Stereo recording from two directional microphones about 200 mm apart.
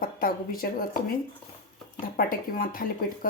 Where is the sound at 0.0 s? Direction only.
45° left (ahead or behind).